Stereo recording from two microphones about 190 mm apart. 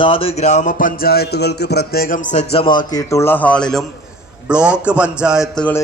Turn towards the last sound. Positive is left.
turn(degrees=-5)  # may be behind; listen again after turning